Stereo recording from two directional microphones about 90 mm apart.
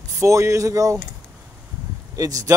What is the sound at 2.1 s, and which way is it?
Speech, 40° right (ahead or behind).